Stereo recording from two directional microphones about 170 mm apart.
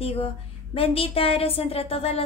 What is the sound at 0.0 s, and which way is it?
A woman's voice, 35° left (ahead or behind).